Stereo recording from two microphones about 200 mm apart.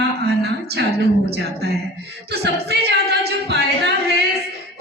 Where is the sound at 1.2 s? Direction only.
55° right (ahead or behind).